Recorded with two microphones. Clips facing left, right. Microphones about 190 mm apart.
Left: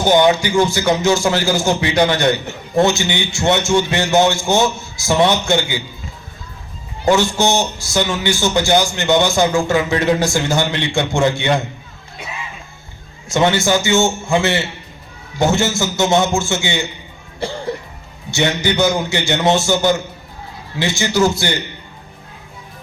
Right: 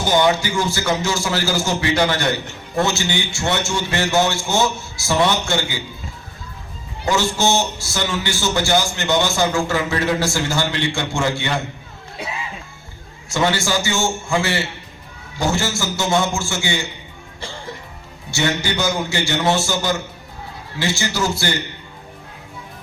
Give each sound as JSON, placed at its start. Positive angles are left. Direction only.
{"t": 0.1, "sound": "a man's voice", "side_deg": 20}
{"t": 7.2, "sound": "a man's voice", "side_deg": 15}
{"t": 13.2, "sound": "a man's voice", "side_deg": 20}
{"t": 18.3, "sound": "a man's voice", "side_deg": 20}